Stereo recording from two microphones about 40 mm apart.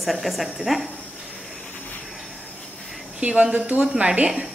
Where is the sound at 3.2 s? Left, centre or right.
Right.